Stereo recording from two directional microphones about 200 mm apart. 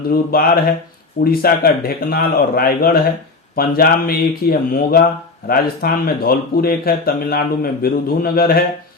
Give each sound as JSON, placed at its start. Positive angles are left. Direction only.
{"t": 0.1, "sound": "speech", "side_deg": 50}